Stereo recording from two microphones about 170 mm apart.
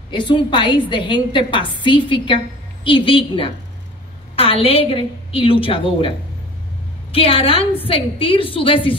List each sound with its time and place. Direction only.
0.1 s a woman's voice: 25° left (ahead or behind)